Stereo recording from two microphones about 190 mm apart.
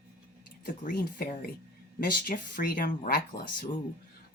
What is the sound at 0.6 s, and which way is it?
Speech, 50° left (ahead or behind).